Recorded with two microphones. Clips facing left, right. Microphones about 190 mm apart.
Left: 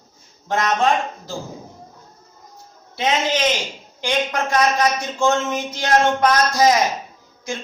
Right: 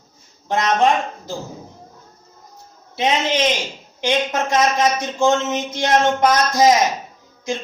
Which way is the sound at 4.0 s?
20° right (ahead or behind).